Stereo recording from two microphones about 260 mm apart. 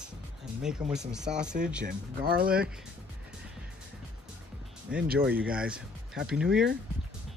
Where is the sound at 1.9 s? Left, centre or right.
Right.